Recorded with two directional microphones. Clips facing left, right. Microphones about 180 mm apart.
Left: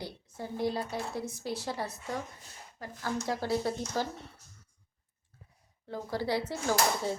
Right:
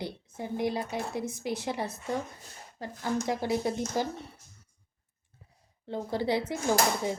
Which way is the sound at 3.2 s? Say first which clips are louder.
Even; 20° right (ahead or behind).